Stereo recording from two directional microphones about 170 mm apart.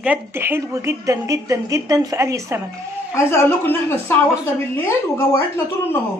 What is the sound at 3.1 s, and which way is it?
A woman's voice, 15° left (ahead or behind).